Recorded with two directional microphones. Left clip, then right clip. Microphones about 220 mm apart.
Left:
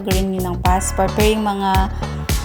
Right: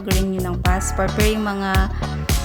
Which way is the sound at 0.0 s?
Centre (ahead or behind).